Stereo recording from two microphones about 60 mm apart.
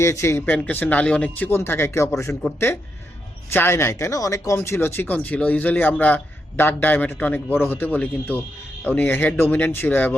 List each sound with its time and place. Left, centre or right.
0.0 s speech: left
0.4 s speech: left
1.5 s speech: left
3.5 s speech: left
3.9 s speech: left
4.5 s speech: left
5.1 s a man's voice: left